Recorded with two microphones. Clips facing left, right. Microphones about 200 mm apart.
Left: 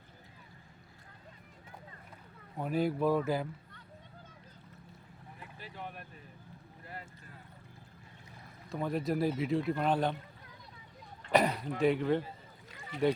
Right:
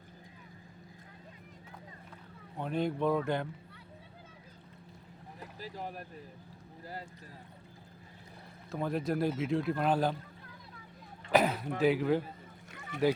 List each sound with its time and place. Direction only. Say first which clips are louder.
2.6 s speech: left 1 dB; 5° left (ahead or behind)
5.4 s boat: right 4 dB; 40° right (ahead or behind)
8.7 s speech: even; centre (ahead or behind)
11.3 s throat clearing: right 1 dB; centre (ahead or behind)
11.8 s speech: right 1 dB; centre (ahead or behind)